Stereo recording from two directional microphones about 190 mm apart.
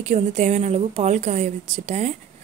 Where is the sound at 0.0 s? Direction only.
40° right (ahead or behind).